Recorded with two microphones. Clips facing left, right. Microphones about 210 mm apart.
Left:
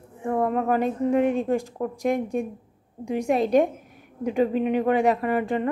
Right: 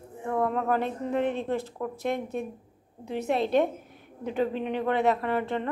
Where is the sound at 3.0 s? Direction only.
10° left (ahead or behind).